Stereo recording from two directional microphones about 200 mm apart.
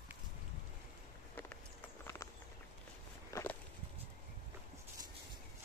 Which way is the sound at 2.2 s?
15° left (ahead or behind).